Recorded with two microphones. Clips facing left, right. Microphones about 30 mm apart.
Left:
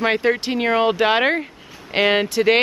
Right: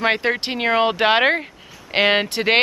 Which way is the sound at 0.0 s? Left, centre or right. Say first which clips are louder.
Left 1 dB; centre.